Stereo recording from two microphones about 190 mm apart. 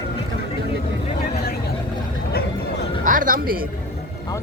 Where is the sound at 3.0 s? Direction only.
45° right (ahead or behind).